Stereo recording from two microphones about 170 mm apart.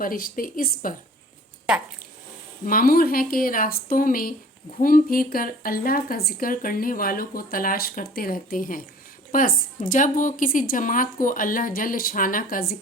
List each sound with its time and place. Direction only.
0.0 s speech: 55° left (ahead or behind)
2.6 s a woman's voice: 60° left (ahead or behind)